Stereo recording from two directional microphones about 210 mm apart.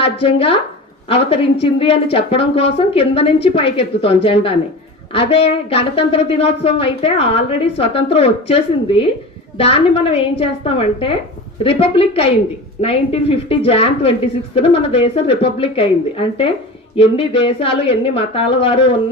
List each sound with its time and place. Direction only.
0.0 s a woman's voice: 25° left (ahead or behind)